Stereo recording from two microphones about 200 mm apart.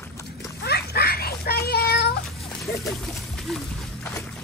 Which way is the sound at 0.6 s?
50° left (ahead or behind).